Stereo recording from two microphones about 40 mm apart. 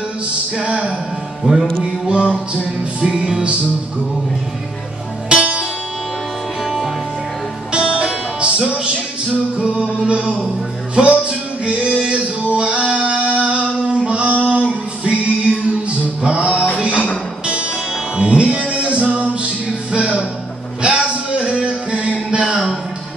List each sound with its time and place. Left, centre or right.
0.6 s music: right
5.3 s music: right
6.6 s music: centre
7.7 s music: right
11.0 s music: right
12.5 s singing: right
14.3 s music: right
18.1 s music: right
20.8 s a sound: right
21.6 s music: right
22.3 s a sound: right